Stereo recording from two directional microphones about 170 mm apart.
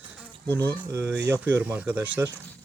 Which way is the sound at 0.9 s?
15° right (ahead or behind).